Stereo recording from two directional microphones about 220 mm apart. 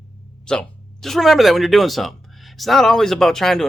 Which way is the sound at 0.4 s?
5° left (ahead or behind).